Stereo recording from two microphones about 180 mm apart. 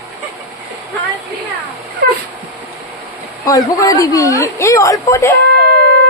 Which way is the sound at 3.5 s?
20° left (ahead or behind).